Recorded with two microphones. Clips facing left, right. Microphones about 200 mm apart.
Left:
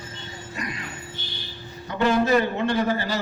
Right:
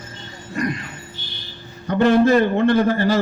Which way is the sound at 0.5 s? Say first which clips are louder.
Right 11 dB; 50° right (ahead or behind).